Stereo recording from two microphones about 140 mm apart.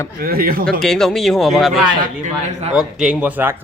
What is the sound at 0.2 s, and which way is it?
Speech, 90° right.